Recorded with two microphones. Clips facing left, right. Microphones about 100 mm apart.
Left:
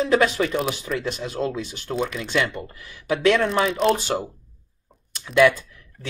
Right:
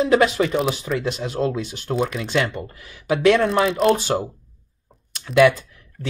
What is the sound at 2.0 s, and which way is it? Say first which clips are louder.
Speech: right 3 dB; 40° right (ahead or behind).